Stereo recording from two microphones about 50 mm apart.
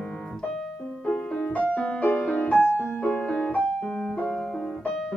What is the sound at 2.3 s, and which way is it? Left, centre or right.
Music, left.